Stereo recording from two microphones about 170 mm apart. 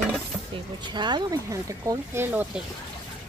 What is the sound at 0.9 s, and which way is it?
Speech, 25° right (ahead or behind).